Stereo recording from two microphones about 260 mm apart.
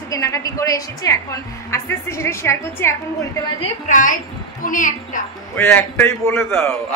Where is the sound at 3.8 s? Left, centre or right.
Left.